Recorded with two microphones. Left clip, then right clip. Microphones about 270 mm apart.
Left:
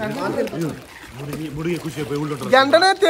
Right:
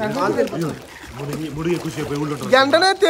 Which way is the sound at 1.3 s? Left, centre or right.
Centre.